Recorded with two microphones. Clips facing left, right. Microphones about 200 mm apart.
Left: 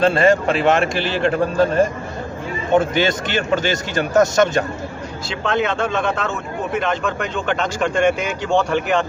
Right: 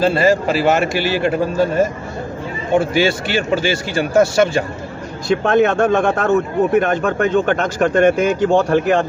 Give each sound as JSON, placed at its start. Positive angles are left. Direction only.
{"t": 0.0, "sound": "a man's voice", "side_deg": -5}
{"t": 5.3, "sound": "a man's voice", "side_deg": -50}